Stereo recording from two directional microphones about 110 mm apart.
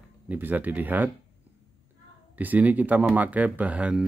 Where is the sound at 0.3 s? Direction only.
15° right (ahead or behind).